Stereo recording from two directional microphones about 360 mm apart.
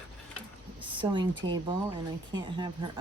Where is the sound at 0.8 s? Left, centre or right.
Centre.